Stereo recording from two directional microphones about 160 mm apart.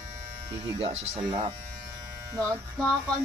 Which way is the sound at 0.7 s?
35° right (ahead or behind).